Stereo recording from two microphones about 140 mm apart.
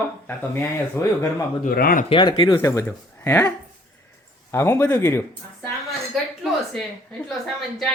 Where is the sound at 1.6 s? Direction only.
85° left.